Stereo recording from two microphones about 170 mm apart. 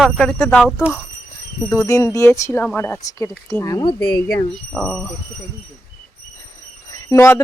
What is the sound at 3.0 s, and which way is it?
A child's voice, 20° left (ahead or behind).